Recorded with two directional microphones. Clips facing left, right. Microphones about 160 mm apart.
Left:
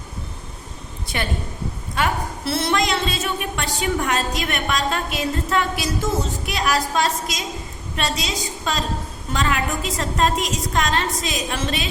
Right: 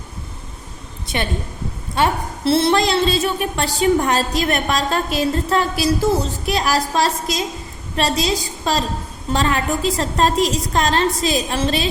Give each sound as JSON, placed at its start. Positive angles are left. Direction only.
{"t": 1.0, "sound": "a woman's voice", "side_deg": -25}